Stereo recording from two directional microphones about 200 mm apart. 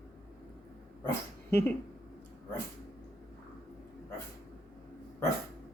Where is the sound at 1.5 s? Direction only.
10° left (ahead or behind).